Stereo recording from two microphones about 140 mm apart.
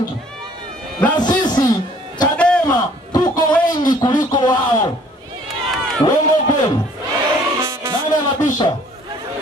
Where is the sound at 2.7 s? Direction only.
30° left (ahead or behind).